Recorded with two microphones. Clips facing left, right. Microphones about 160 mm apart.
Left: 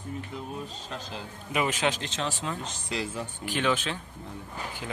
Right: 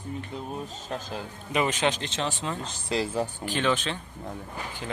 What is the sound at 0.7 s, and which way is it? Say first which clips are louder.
Speech: right 4 dB; 45° right (ahead or behind).